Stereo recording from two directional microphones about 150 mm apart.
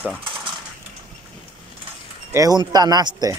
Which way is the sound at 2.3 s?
25° right (ahead or behind).